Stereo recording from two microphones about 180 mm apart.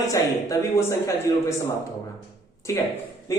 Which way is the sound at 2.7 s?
15° left (ahead or behind).